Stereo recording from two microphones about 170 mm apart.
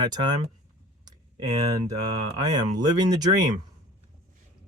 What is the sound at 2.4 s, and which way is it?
Speech, 25° right (ahead or behind).